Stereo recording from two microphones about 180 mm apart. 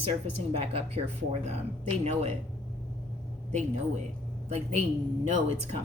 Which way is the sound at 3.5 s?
40° right (ahead or behind).